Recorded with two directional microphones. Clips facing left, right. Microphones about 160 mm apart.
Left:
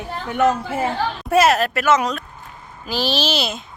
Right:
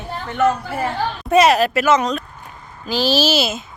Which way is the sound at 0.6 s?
25° left (ahead or behind).